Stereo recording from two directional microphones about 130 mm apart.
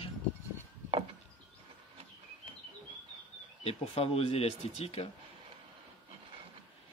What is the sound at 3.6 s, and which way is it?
Speech, 50° left (ahead or behind).